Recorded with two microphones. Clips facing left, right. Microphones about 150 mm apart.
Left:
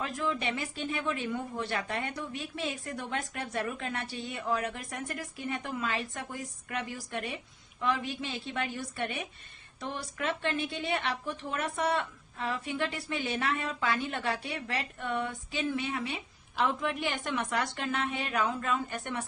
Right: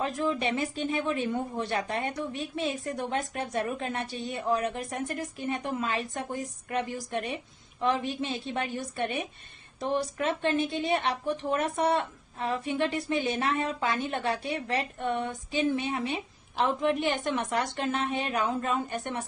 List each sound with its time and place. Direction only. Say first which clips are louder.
0.0 s a woman's voice: right 4 dB; 30° right (ahead or behind)
16.6 s a woman's voice: right 5 dB; 35° right (ahead or behind)
17.3 s a woman's voice: right 3 dB; 20° right (ahead or behind)